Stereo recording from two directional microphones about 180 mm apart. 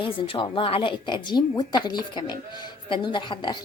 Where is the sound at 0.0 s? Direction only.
30° left (ahead or behind).